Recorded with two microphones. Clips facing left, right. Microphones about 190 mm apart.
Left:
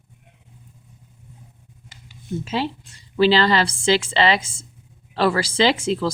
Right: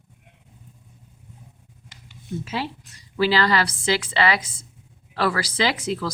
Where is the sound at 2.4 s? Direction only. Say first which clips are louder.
Left 6 dB; 25° left (ahead or behind).